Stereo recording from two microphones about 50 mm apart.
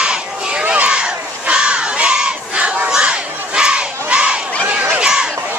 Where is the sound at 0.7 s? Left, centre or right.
Right.